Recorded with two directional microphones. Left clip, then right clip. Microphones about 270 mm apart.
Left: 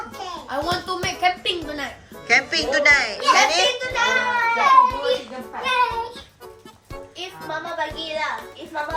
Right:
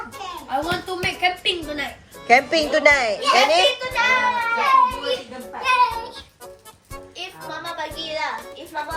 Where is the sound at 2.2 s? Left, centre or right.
Centre.